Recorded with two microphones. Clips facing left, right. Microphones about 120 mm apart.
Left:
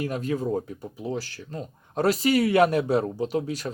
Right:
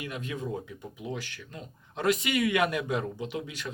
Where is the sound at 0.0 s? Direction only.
40° left (ahead or behind).